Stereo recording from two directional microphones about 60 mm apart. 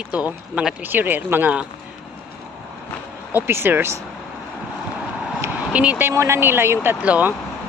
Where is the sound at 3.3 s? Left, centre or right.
Right.